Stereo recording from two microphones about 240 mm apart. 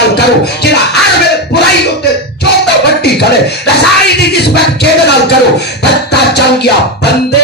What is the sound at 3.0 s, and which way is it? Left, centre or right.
Music, left.